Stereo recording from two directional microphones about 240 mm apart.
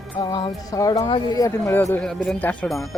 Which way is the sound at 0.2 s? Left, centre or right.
Centre.